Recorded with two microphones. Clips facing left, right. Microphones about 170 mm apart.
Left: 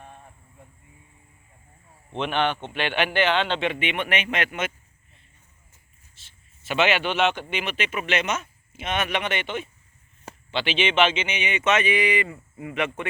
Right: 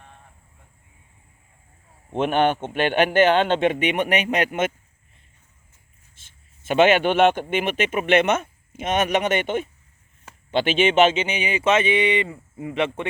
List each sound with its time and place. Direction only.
2.1 s a man's voice: 45° right (ahead or behind)
6.1 s a man's voice: 50° right (ahead or behind); by 13.1 s 25° right (ahead or behind)